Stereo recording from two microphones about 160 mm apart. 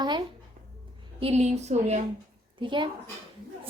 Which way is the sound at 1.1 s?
40° right (ahead or behind).